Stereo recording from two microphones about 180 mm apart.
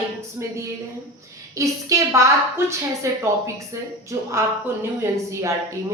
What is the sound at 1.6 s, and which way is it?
Speech, 15° right (ahead or behind).